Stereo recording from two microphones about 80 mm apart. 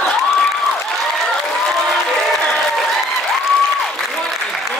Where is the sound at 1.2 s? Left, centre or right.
Centre.